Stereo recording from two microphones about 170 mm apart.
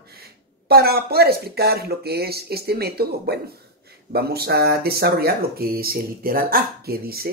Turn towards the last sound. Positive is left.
turn(degrees=-65)  # may be behind; listen again after turning